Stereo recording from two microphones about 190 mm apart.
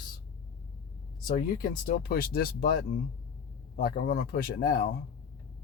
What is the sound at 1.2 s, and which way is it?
Speech, 45° left (ahead or behind).